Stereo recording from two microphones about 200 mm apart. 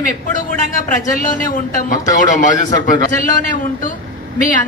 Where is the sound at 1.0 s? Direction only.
40° left (ahead or behind).